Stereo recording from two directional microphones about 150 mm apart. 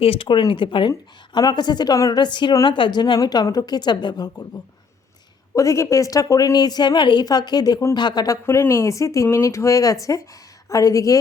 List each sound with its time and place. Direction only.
0.0 s a woman's voice: 40° left (ahead or behind)
5.5 s a woman's voice: 20° left (ahead or behind)